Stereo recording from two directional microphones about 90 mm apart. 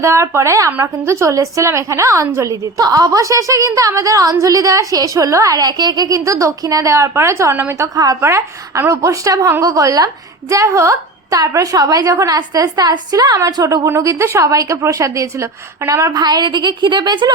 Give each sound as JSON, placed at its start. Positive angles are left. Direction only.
{"t": 0.0, "sound": "a woman's voice", "side_deg": -35}
{"t": 7.9, "sound": "a woman's voice", "side_deg": -45}
{"t": 8.2, "sound": "a woman's voice", "side_deg": -30}
{"t": 13.8, "sound": "a woman's voice", "side_deg": -30}
{"t": 16.1, "sound": "a woman's voice", "side_deg": -50}